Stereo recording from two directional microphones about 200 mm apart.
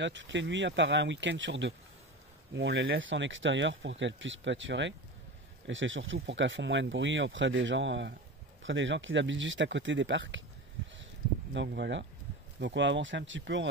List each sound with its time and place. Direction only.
0.0 s speech: 65° right (ahead or behind)
11.5 s speech: 60° right (ahead or behind)